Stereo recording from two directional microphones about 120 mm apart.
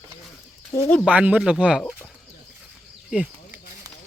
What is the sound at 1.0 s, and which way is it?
Speech, 10° right (ahead or behind).